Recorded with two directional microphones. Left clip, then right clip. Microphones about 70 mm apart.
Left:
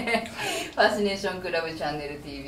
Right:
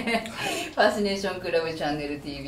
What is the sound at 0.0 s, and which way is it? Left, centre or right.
A woman's voice, centre.